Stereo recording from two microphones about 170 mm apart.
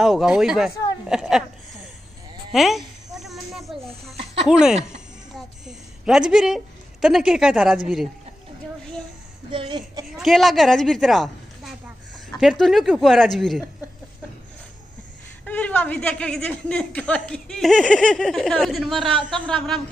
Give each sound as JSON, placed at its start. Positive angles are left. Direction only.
{"t": 0.0, "sound": "speech", "side_deg": 0}
{"t": 2.5, "sound": "snake", "side_deg": 0}
{"t": 5.3, "sound": "a woman's voice", "side_deg": -5}
{"t": 9.5, "sound": "speech", "side_deg": -30}
{"t": 10.1, "sound": "a woman's voice", "side_deg": 0}
{"t": 15.4, "sound": "speech", "side_deg": 10}